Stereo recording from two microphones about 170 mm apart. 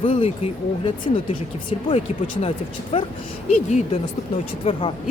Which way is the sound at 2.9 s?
35° left (ahead or behind).